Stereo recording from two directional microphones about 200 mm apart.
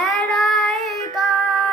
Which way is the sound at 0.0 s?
Centre (ahead or behind).